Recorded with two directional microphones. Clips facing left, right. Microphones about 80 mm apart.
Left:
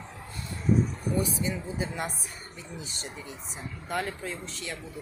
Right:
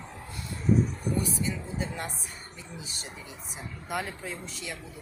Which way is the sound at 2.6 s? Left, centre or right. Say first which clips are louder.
Left 4 dB; centre.